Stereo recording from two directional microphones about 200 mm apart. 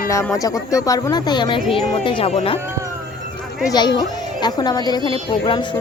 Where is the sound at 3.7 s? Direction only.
20° left (ahead or behind).